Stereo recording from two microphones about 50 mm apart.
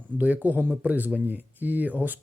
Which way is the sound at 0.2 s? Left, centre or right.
Right.